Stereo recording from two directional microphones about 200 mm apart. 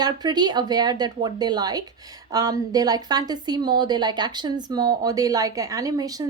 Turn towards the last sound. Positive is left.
turn(degrees=-20)  # may be behind; listen again after turning